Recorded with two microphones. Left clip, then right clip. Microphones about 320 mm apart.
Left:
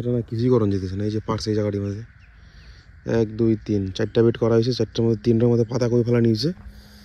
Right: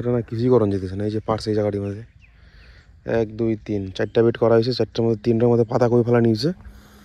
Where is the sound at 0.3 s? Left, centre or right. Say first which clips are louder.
Right 2 dB; centre.